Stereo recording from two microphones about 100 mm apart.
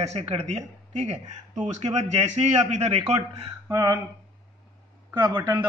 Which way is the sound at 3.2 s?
30° right (ahead or behind).